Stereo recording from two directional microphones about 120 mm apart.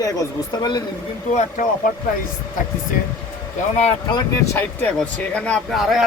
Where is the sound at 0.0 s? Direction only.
30° left (ahead or behind).